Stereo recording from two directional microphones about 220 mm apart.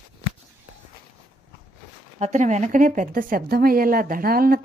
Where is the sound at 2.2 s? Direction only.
35° right (ahead or behind).